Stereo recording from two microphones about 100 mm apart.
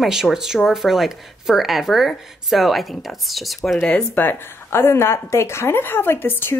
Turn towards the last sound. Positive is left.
turn(degrees=20)  # may be behind; listen again after turning